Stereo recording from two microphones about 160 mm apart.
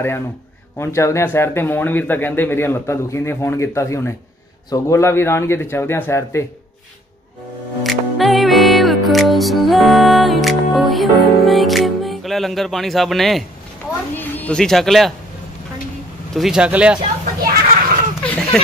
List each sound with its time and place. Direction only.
0.7 s speech: 20° left (ahead or behind)
7.8 s music: centre (ahead or behind)
14.1 s speech: 10° left (ahead or behind)
16.3 s speech: 5° right (ahead or behind)
17.4 s children playing: 65° right (ahead or behind)
18.2 s a sound: 10° left (ahead or behind)